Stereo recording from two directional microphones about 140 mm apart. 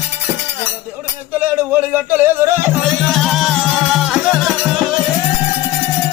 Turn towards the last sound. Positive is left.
turn(degrees=0)  # may be behind; listen again after turning